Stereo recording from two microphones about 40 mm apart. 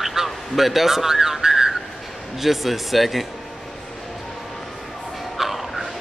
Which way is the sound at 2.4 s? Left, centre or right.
Centre.